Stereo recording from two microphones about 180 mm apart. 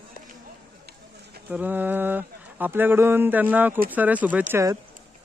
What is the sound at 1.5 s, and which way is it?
Speech, 10° right (ahead or behind).